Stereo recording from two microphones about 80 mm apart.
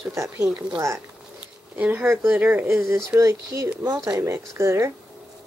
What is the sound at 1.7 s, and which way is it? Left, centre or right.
Speech, centre.